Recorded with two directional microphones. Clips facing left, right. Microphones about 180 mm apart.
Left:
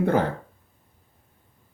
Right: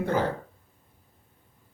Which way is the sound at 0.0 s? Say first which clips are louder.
Left 4 dB; 55° left (ahead or behind).